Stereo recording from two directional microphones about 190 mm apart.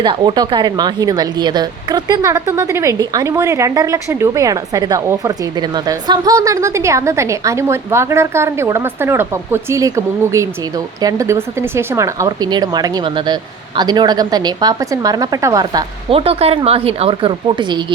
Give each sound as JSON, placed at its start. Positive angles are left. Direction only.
{"t": 0.0, "sound": "a woman's voice", "side_deg": -25}